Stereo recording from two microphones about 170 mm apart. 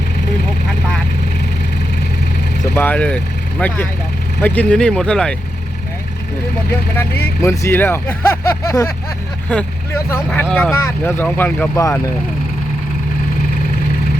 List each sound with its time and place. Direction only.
2.7 s speech: 10° left (ahead or behind)
6.7 s speech: 15° left (ahead or behind)